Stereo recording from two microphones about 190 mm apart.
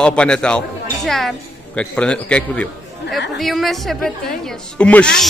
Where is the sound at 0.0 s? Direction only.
5° left (ahead or behind).